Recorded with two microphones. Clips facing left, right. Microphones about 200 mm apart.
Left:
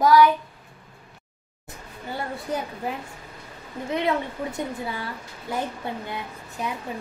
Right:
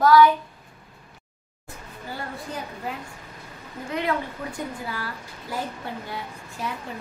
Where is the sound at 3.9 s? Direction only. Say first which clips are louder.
Left 2 dB; 20° left (ahead or behind).